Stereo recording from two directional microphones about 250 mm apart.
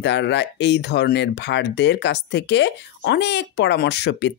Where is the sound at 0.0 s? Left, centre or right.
Left.